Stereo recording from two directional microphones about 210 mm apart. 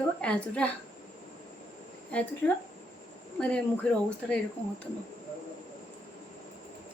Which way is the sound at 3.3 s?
5° left (ahead or behind).